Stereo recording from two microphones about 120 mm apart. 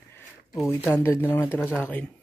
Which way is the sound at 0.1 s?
20° left (ahead or behind).